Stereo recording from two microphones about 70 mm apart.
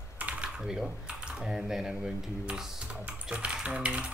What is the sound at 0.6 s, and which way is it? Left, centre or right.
Speech, centre.